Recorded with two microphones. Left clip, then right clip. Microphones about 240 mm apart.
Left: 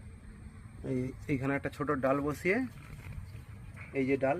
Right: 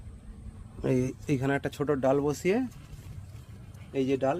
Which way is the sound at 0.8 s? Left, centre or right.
Right.